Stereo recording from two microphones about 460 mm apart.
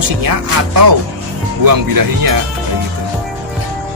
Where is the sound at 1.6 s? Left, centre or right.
Right.